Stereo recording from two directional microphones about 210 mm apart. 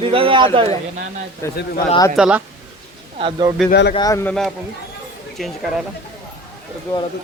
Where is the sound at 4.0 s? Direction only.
15° left (ahead or behind).